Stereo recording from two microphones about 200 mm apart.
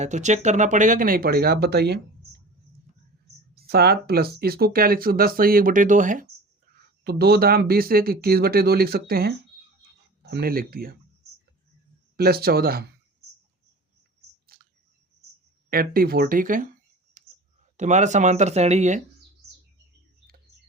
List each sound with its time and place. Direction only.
0.0 s speech: 35° right (ahead or behind); by 2.0 s 55° right (ahead or behind)
3.5 s speech: 50° right (ahead or behind)
7.0 s speech: 50° right (ahead or behind)
12.1 s speech: 50° right (ahead or behind)
14.5 s a sound: 50° right (ahead or behind)
15.7 s speech: 50° right (ahead or behind)
17.2 s clicking: 40° right (ahead or behind)
17.7 s speech: 35° right (ahead or behind)